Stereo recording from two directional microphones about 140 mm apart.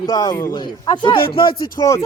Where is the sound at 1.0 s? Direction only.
35° left (ahead or behind).